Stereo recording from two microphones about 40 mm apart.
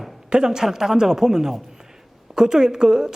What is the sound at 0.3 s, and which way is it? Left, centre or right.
A woman's voice, centre.